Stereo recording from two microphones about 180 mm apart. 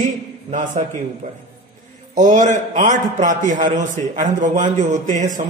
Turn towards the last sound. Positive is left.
turn(degrees=-40)  # may be behind; listen again after turning